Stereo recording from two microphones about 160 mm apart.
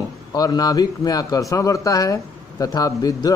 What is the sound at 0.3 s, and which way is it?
Speech, 25° left (ahead or behind).